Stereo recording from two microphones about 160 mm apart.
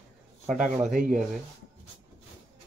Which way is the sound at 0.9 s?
55° right (ahead or behind).